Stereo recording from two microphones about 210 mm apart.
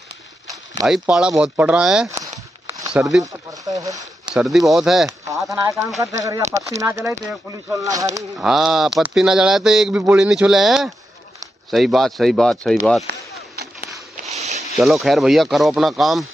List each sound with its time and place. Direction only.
0.8 s a man's voice: centre (ahead or behind)
3.2 s speech: 15° right (ahead or behind)
4.4 s a man's voice: centre (ahead or behind)
5.2 s speech: 15° right (ahead or behind)
8.4 s a man's voice: centre (ahead or behind)
13.1 s speech: 50° right (ahead or behind)
14.3 s a sound: 30° right (ahead or behind)
14.8 s a man's voice: centre (ahead or behind)